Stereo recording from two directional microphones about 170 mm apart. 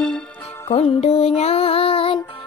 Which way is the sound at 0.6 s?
35° left (ahead or behind).